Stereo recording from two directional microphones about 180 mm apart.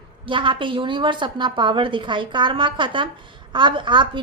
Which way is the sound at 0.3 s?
30° right (ahead or behind).